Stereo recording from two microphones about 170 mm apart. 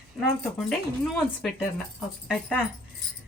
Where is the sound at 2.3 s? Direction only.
5° left (ahead or behind).